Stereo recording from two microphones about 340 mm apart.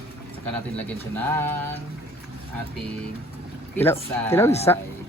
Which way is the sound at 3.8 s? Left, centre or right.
Centre.